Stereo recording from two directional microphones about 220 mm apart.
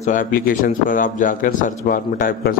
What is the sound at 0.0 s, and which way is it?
A man's voice, 35° left (ahead or behind).